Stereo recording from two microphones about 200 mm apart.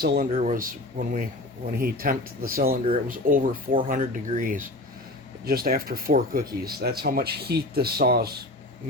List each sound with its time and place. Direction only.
0.0 s speech: 50° right (ahead or behind)
0.3 s speech: 40° right (ahead or behind)